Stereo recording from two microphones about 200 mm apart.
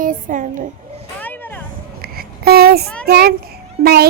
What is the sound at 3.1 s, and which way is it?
Child singing, 50° right (ahead or behind).